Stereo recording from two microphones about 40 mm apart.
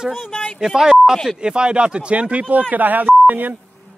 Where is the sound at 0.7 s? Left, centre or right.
Centre; by 2.4 s right.